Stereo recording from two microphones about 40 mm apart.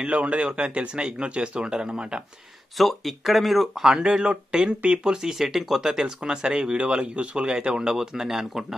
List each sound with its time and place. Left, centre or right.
0.0 s speech: right
2.8 s speech: centre
3.8 s speech: centre